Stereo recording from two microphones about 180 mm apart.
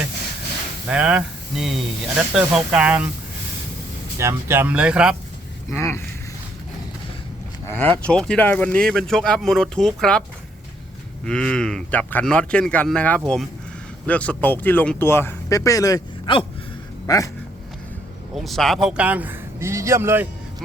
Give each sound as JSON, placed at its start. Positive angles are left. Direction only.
{"t": 0.9, "sound": "speech", "side_deg": -5}
{"t": 4.2, "sound": "speech", "side_deg": -15}
{"t": 5.7, "sound": "speech", "side_deg": 15}
{"t": 7.7, "sound": "speech", "side_deg": 10}
{"t": 11.3, "sound": "speech", "side_deg": 5}
{"t": 18.3, "sound": "speech", "side_deg": 0}